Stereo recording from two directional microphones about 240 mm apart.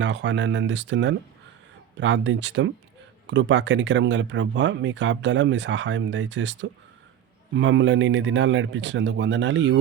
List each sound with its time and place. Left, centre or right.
0.0 s speech: right